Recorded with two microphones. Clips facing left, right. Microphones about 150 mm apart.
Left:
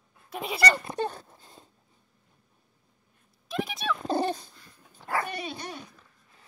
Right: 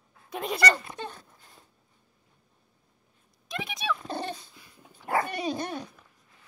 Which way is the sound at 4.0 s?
40° left (ahead or behind).